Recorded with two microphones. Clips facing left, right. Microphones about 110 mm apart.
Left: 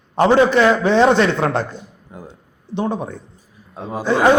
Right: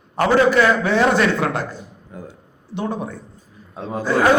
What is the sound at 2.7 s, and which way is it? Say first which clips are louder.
Speech: left 3 dB; 20° left (ahead or behind).